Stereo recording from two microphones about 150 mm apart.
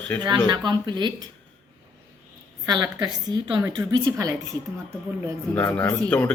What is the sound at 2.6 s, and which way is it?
A woman's voice, 30° right (ahead or behind).